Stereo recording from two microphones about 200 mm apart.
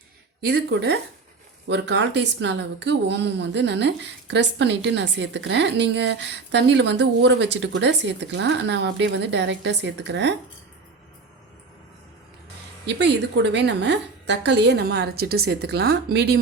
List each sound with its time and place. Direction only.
0.4 s a woman's voice: 55° right (ahead or behind)
12.8 s a woman's voice: 55° right (ahead or behind)